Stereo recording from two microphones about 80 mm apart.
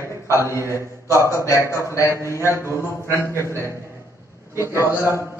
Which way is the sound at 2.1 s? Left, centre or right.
Right.